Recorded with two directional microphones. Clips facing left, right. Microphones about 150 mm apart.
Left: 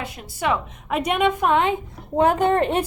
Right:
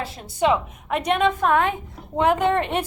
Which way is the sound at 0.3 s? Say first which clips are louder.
Right 3 dB; 20° right (ahead or behind).